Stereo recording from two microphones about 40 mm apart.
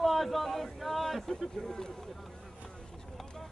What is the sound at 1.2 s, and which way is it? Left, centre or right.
Speech, centre.